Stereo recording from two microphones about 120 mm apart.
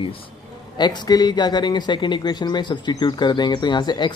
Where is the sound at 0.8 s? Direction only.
35° left (ahead or behind).